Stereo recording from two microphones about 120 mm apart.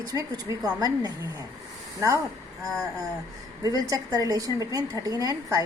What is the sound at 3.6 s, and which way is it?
A woman's voice, 30° right (ahead or behind).